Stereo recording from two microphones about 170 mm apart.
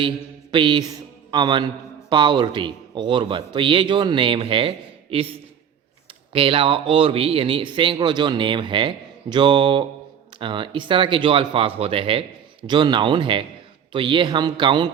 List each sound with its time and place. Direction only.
0.5 s a man's voice: 30° right (ahead or behind)
6.3 s a man's voice: 30° right (ahead or behind)